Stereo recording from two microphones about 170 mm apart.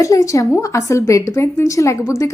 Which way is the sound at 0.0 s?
20° left (ahead or behind).